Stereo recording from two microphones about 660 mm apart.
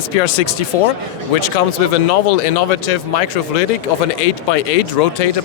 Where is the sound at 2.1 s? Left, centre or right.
Left.